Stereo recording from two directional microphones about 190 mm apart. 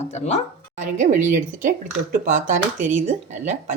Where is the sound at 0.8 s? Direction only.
45° right (ahead or behind).